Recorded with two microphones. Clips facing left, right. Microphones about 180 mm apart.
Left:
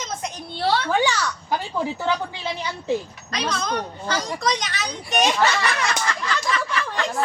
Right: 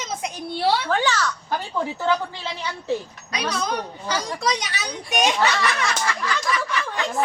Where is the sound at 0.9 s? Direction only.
15° left (ahead or behind).